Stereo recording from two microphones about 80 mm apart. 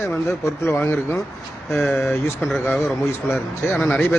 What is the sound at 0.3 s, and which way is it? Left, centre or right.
Speech, left.